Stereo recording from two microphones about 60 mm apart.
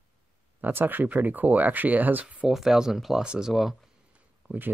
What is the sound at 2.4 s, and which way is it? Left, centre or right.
Speech, centre.